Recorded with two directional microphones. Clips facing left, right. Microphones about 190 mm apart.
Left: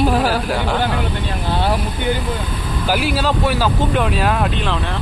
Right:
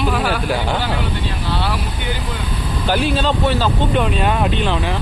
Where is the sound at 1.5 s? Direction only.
50° left (ahead or behind).